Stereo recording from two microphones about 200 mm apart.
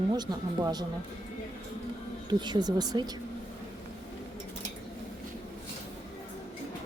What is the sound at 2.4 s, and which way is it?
Speech, 20° right (ahead or behind).